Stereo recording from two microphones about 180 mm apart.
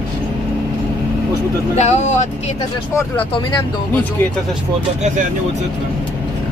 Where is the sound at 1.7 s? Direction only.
40° left (ahead or behind).